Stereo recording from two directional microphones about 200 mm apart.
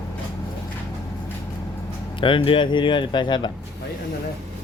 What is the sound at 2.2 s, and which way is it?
Speech, 25° left (ahead or behind).